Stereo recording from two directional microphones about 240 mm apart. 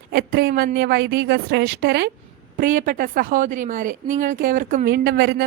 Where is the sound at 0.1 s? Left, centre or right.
Right.